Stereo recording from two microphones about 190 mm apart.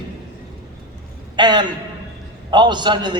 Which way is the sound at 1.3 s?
25° right (ahead or behind).